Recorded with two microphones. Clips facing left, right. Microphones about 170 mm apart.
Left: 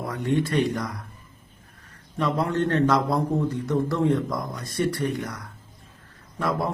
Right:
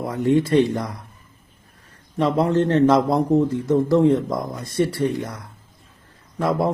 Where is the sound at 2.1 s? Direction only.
25° right (ahead or behind).